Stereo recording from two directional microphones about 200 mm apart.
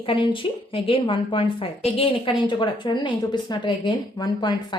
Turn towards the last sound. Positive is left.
turn(degrees=20)  # may be behind; listen again after turning